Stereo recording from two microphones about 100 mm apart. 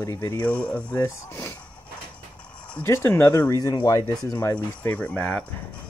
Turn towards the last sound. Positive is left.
turn(degrees=10)  # may be behind; listen again after turning